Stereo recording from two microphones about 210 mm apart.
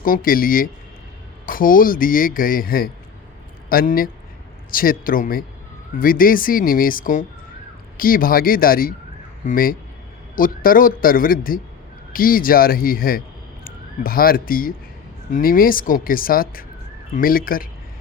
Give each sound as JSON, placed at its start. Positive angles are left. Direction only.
{"t": 0.0, "sound": "a man's voice", "side_deg": 40}